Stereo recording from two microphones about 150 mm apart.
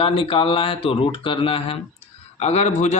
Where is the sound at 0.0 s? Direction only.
35° left (ahead or behind).